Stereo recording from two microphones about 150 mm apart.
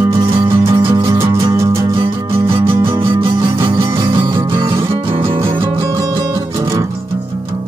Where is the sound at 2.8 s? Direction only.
35° right (ahead or behind).